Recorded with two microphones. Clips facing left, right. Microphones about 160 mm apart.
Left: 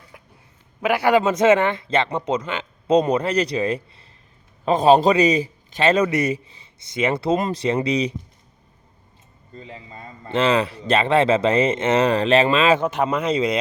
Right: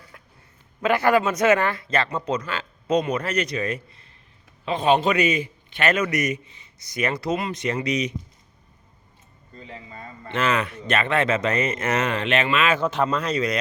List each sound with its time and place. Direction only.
0.1 s a sound: 15° left (ahead or behind)
0.8 s speech: 10° left (ahead or behind)
1.2 s a man's voice: 25° left (ahead or behind)
9.6 s speech: 25° left (ahead or behind)
12.8 s speech: 15° left (ahead or behind)